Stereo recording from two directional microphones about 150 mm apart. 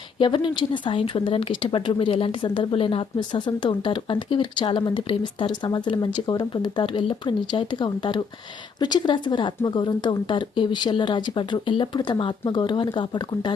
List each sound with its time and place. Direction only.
0.2 s speech: 35° left (ahead or behind)